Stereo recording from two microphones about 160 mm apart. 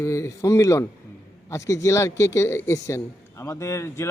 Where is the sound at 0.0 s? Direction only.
20° left (ahead or behind).